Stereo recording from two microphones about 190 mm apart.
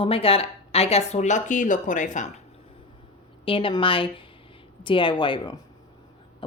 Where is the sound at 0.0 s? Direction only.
30° left (ahead or behind).